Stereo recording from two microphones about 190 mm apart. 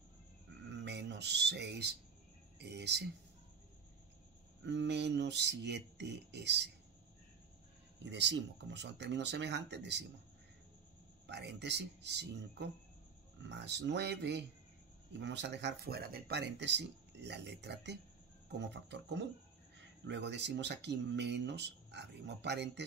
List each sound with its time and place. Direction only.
0.7 s a sound: 70° right (ahead or behind)
2.6 s speech: 65° right (ahead or behind)
4.6 s speech: 65° right (ahead or behind)
8.0 s speech: 70° right (ahead or behind)
11.2 s speech: 65° right (ahead or behind)
18.6 s a sound: 65° right (ahead or behind)
20.1 s speech: 65° right (ahead or behind)